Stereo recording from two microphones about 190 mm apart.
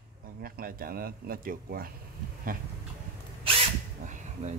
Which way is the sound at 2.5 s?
50° right (ahead or behind).